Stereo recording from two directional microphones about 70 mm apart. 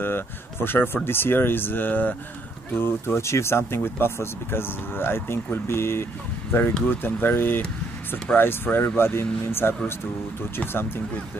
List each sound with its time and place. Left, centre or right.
0.0 s speech: left
2.8 s speech: left